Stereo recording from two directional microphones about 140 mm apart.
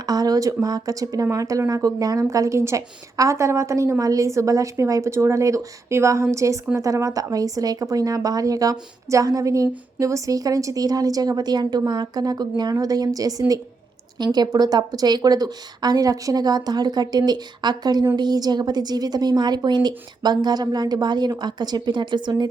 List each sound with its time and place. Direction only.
0.0 s a woman's voice: 25° right (ahead or behind)